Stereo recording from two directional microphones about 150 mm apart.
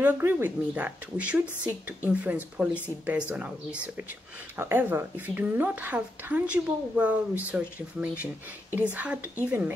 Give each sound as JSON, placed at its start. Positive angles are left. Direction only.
{"t": 0.0, "sound": "speech", "side_deg": -15}